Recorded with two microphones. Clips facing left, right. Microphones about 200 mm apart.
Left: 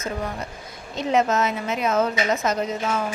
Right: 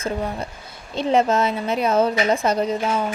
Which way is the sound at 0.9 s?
30° right (ahead or behind).